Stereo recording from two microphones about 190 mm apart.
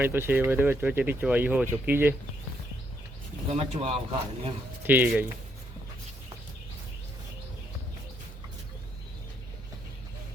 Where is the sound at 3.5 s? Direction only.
30° right (ahead or behind).